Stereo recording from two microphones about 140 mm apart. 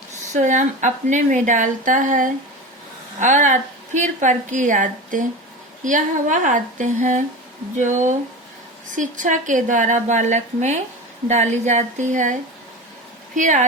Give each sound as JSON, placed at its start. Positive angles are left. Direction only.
{"t": 0.3, "sound": "a woman's voice", "side_deg": -60}